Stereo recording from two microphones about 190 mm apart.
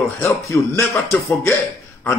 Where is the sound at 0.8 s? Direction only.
15° left (ahead or behind).